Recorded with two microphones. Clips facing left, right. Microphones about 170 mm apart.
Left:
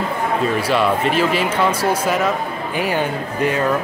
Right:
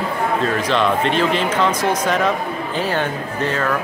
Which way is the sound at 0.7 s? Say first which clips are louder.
Even; 5° left (ahead or behind).